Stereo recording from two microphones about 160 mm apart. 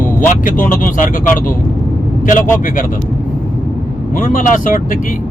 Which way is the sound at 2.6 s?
55° left (ahead or behind).